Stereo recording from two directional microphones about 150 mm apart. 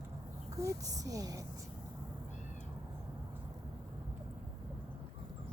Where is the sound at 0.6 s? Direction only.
20° right (ahead or behind).